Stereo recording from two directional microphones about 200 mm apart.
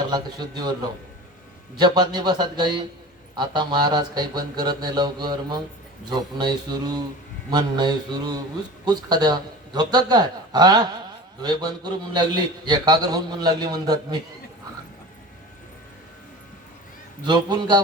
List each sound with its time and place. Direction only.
0.1 s a man's voice: 20° right (ahead or behind)
17.2 s a man's voice: 20° right (ahead or behind)